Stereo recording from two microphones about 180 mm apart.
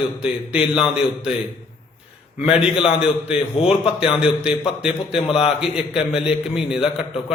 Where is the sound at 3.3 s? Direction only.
35° left (ahead or behind).